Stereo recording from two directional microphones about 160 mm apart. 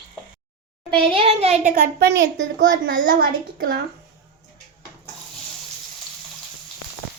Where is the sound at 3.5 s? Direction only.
65° right (ahead or behind).